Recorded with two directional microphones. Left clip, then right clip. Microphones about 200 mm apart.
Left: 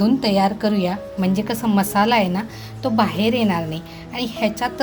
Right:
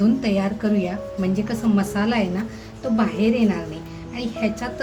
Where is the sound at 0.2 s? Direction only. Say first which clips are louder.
Left 5 dB; 35° left (ahead or behind).